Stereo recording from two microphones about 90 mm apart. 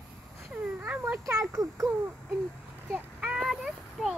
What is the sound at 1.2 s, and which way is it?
Speech, 35° right (ahead or behind).